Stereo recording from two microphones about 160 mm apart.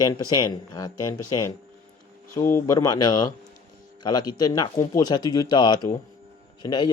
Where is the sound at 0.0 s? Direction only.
20° left (ahead or behind).